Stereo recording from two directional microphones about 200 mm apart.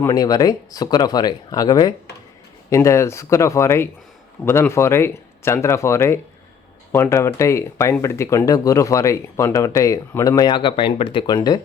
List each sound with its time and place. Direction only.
0.0 s speech: 20° left (ahead or behind)